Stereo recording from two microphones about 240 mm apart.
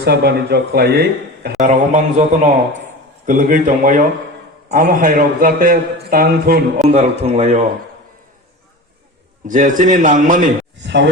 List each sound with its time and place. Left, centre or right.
0.0 s a man's voice: right
6.9 s speech: right
9.5 s a man's voice: right
10.6 s a sound: right